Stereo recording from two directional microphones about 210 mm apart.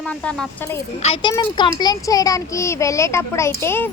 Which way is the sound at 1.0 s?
25° left (ahead or behind).